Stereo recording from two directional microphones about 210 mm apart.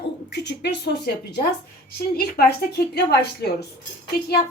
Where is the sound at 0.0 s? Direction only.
55° left (ahead or behind).